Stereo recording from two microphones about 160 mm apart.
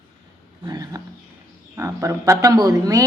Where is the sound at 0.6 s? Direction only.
25° right (ahead or behind).